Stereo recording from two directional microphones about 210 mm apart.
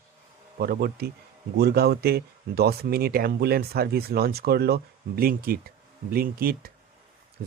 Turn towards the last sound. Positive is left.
turn(degrees=-45)  # may be behind; listen again after turning